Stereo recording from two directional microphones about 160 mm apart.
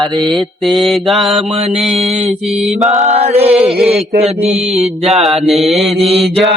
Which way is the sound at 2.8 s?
40° right (ahead or behind).